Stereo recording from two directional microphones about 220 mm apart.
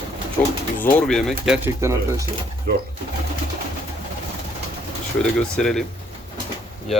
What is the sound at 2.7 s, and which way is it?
Speech, 45° right (ahead or behind).